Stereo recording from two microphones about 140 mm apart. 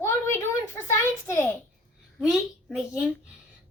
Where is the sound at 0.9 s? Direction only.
20° left (ahead or behind).